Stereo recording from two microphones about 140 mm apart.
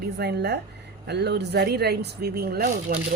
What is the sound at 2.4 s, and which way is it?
Speech, 90° right.